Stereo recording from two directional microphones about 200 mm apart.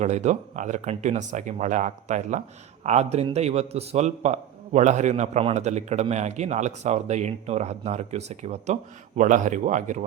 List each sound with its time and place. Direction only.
0.0 s a man's voice: 35° right (ahead or behind)